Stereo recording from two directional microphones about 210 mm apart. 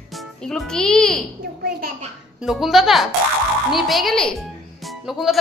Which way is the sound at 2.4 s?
Centre (ahead or behind).